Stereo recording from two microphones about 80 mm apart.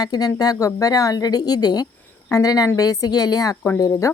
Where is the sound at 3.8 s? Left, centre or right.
Left.